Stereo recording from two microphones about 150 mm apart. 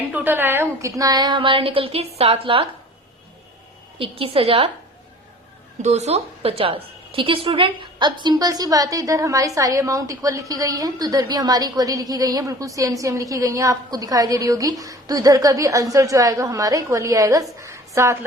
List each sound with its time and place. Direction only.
0.1 s a woman's voice: 15° right (ahead or behind); by 2.6 s 35° right (ahead or behind)
3.9 s a woman's voice: 35° right (ahead or behind)
5.8 s a woman's voice: 45° right (ahead or behind); by 17.4 s 20° right (ahead or behind)
17.6 s a sound: 20° right (ahead or behind)